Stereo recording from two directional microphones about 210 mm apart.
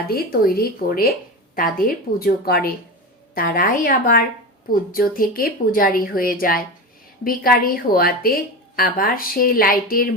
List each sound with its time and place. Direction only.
0.1 s a woman's voice: 45° left (ahead or behind)